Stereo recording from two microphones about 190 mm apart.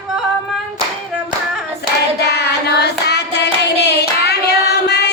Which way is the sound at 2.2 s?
60° left (ahead or behind).